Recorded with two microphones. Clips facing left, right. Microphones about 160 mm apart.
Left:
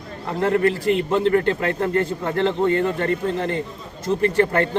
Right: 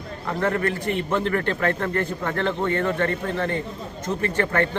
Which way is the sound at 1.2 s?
30° left (ahead or behind).